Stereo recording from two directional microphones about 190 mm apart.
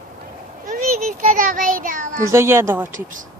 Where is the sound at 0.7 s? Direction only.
40° right (ahead or behind).